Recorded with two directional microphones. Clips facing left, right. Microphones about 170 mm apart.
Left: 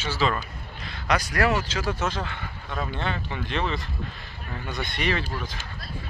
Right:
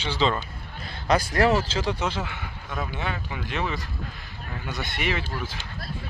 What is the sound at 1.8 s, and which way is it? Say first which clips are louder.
Speech: even; 10° right (ahead or behind).